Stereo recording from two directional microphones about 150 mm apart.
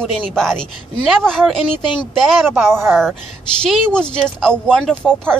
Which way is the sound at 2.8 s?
15° right (ahead or behind).